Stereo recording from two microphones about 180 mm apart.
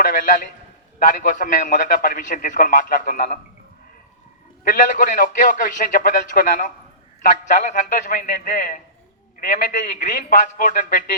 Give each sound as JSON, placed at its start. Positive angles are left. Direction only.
{"t": 0.1, "sound": "a man's voice", "side_deg": 45}
{"t": 4.7, "sound": "a man's voice", "side_deg": 45}